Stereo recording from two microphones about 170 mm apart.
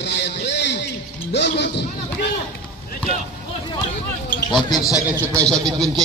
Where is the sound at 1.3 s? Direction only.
80° left.